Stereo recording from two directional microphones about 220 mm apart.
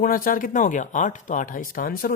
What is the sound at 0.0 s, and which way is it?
Speech, 40° left (ahead or behind).